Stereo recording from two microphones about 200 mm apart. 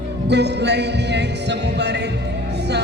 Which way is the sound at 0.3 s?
60° right (ahead or behind).